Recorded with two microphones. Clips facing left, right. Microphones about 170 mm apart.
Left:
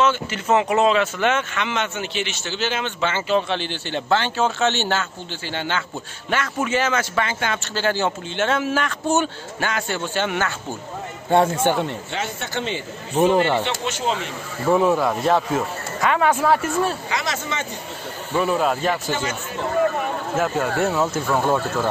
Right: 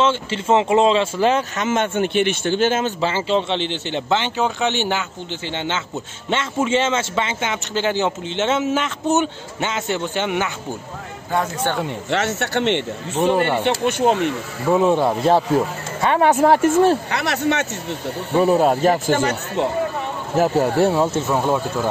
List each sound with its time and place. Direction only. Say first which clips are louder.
0.0 s speech: right 1 dB; 25° right (ahead or behind); by 2.9 s 50° right (ahead or behind)
3.0 s a man's voice: right 1 dB; 30° right (ahead or behind)
11.2 s speech: left 5 dB; 25° left (ahead or behind)
12.1 s speech: right 7 dB; 80° right
13.1 s speech: left 1 dB; 10° left (ahead or behind)
13.8 s speech: right 7 dB; 60° right (ahead or behind)
14.7 s a man's voice: right 2 dB; 25° right (ahead or behind)
16.8 s speech: right 7 dB; 65° right (ahead or behind)
18.3 s speech: right 5 dB; 35° right (ahead or behind)
20.3 s speech: right 6 dB; 35° right (ahead or behind)